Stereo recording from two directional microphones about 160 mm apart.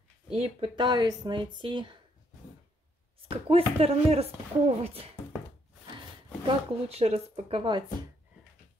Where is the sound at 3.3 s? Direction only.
35° right (ahead or behind).